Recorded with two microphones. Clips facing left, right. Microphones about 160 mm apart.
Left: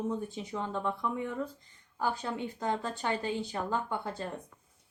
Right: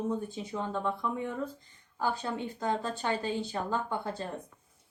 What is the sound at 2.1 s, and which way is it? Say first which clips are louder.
A woman's voice: right 1 dB; 15° left (ahead or behind).